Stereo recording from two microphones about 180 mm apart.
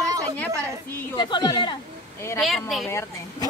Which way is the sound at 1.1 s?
25° left (ahead or behind).